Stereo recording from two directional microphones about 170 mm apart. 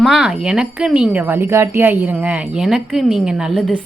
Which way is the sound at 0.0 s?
5° right (ahead or behind).